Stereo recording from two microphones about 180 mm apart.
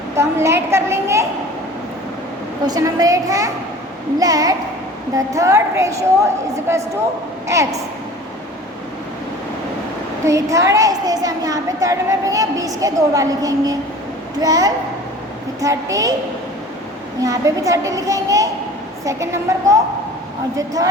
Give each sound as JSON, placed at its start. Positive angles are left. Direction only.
{"t": 0.2, "sound": "a woman's voice", "side_deg": -15}
{"t": 2.6, "sound": "a woman's voice", "side_deg": -20}
{"t": 7.4, "sound": "a woman's voice", "side_deg": -15}
{"t": 10.2, "sound": "a woman's voice", "side_deg": -15}
{"t": 17.2, "sound": "a woman's voice", "side_deg": -20}